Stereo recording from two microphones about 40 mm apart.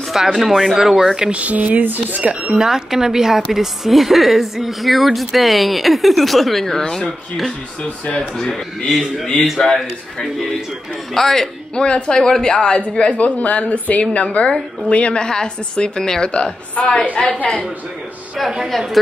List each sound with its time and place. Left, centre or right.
0.3 s a woman's voice: centre
1.3 s speech: right
2.5 s a woman's voice: centre
8.5 s a woman's voice: centre
9.2 s speech: left
9.6 s speech: centre
11.1 s speech: centre
11.7 s a woman's voice: left